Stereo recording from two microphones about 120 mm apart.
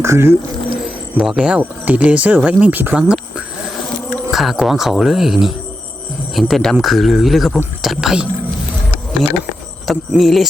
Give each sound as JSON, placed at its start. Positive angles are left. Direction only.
{"t": 0.0, "sound": "speech", "side_deg": -20}
{"t": 1.1, "sound": "speech", "side_deg": -5}
{"t": 9.8, "sound": "speech", "side_deg": 0}